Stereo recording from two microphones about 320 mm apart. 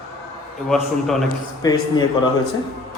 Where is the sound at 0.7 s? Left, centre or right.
Centre.